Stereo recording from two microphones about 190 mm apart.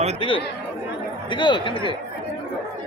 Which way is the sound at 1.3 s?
25° left (ahead or behind).